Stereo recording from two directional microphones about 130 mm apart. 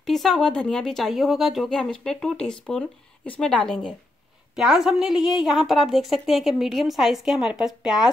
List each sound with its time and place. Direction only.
0.0 s speech: centre (ahead or behind)